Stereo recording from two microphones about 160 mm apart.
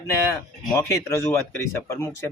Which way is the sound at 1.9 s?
20° left (ahead or behind).